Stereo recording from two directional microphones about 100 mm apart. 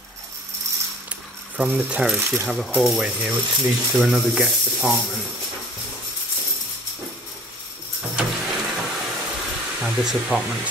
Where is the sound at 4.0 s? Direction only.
5° right (ahead or behind).